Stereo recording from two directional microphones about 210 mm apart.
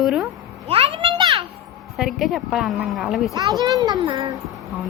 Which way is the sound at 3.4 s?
20° right (ahead or behind).